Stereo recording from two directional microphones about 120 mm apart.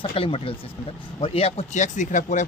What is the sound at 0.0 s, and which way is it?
Speech, 50° left (ahead or behind).